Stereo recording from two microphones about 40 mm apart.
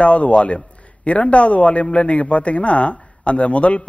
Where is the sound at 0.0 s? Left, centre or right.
Left.